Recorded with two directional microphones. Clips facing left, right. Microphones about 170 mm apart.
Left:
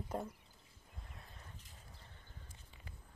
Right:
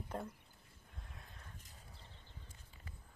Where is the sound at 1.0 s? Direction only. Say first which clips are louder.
Left 1 dB; centre (ahead or behind).